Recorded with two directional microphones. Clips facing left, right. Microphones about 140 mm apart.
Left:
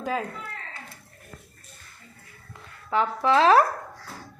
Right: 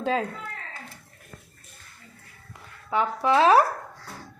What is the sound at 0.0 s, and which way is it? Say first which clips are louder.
Speech: right 3 dB; 25° right (ahead or behind).